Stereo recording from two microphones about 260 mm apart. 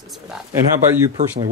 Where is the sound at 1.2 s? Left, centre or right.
Right.